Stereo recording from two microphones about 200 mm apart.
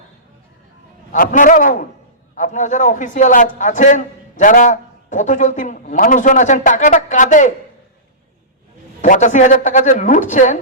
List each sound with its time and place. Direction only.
1.1 s a man's voice: 40° left (ahead or behind)
9.0 s a man's voice: 40° left (ahead or behind)